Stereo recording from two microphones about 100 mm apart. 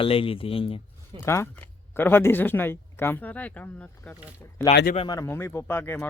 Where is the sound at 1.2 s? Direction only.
25° left (ahead or behind).